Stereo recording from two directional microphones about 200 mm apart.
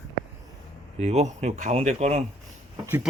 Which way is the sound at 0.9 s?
30° right (ahead or behind).